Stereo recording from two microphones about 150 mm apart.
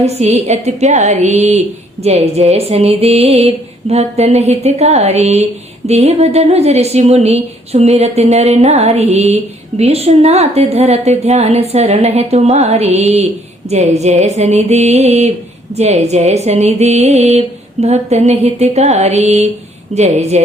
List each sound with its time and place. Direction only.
0.0 s a woman's voice: 45° right (ahead or behind)